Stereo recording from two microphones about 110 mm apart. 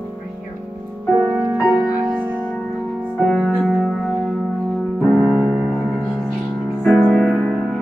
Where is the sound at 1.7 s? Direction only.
15° right (ahead or behind).